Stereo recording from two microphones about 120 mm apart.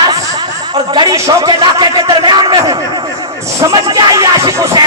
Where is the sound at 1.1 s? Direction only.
25° right (ahead or behind).